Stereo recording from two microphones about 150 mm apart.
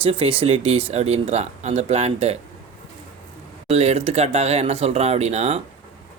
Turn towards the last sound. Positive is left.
turn(degrees=-45)  # may be behind; listen again after turning